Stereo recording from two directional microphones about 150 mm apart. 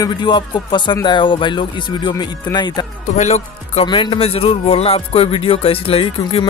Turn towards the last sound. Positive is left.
turn(degrees=40)  # may be behind; listen again after turning